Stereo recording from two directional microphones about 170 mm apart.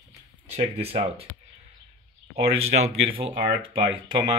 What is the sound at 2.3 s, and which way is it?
Speech, 35° right (ahead or behind).